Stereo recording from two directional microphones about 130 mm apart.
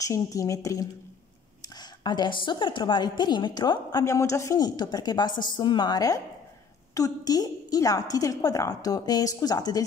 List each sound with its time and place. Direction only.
0.0 s a woman's voice: 25° left (ahead or behind)